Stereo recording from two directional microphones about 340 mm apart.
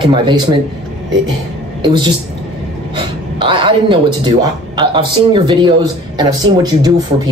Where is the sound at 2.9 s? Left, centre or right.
Centre.